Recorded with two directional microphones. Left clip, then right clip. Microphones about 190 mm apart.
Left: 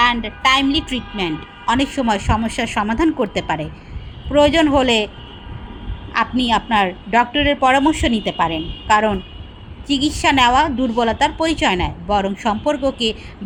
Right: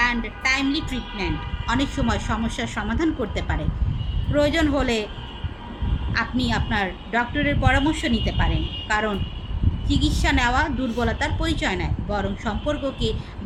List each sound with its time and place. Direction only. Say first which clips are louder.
0.2 s a woman's voice: left 7 dB; 30° left (ahead or behind)
6.5 s a woman's voice: left 9 dB; 30° left (ahead or behind)